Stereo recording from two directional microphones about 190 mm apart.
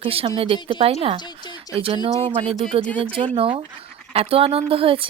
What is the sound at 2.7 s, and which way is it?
Speech, 30° right (ahead or behind).